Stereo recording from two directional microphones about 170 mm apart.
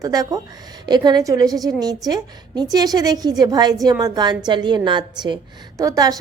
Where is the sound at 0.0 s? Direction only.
20° right (ahead or behind).